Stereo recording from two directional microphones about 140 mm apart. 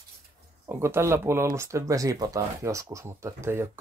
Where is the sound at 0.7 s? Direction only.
20° right (ahead or behind).